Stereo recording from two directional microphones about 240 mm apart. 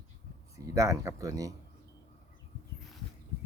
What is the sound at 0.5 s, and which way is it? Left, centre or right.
Speech, centre.